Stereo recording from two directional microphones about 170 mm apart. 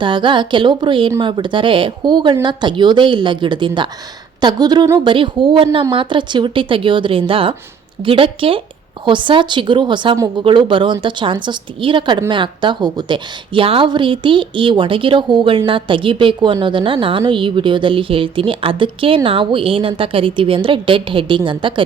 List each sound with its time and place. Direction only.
0.0 s a woman's voice: 30° right (ahead or behind)